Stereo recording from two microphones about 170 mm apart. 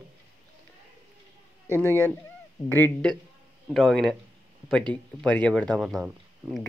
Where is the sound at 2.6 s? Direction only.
10° left (ahead or behind).